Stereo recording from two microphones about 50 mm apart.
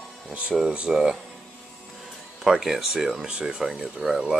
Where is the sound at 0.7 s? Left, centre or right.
Centre.